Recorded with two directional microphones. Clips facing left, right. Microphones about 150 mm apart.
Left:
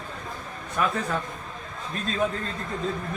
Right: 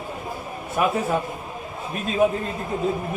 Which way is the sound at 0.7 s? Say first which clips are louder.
Right 5 dB; 15° right (ahead or behind).